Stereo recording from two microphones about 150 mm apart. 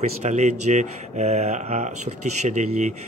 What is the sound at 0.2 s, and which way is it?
A man's voice, 50° right (ahead or behind).